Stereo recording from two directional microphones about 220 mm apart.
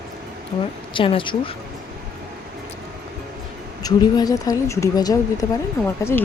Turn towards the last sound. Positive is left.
turn(degrees=10)  # may be behind; listen again after turning